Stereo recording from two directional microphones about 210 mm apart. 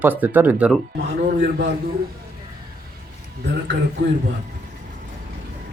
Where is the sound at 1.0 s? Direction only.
55° right (ahead or behind).